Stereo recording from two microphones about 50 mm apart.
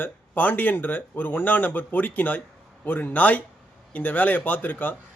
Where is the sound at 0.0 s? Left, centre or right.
Left.